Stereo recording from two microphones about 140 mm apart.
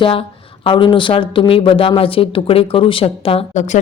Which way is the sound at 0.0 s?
40° left (ahead or behind).